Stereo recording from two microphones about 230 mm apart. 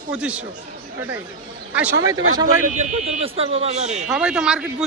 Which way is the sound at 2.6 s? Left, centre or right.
Right.